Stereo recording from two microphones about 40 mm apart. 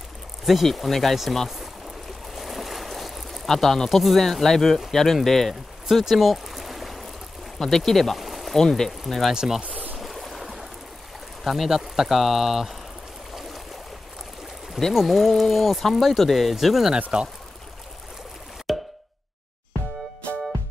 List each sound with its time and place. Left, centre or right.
0.5 s speech: centre
2.3 s boat: centre
4.0 s speech: centre
5.5 s stream: centre
7.5 s speech: centre
9.3 s speech: centre
9.9 s stream: centre
11.4 s speech: centre
13.3 s stream: centre
15.0 s speech: centre
17.1 s speech: right
18.7 s plop: centre